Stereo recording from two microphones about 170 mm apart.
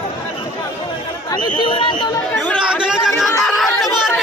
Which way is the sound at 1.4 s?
30° left (ahead or behind).